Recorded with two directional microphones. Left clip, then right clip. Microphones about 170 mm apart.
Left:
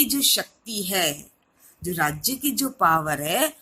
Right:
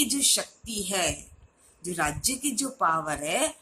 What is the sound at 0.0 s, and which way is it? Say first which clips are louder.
Speech: left 4 dB; 30° left (ahead or behind).